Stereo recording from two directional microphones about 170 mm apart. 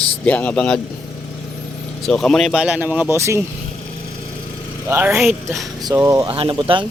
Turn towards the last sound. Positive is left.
turn(degrees=-25)  # may be behind; listen again after turning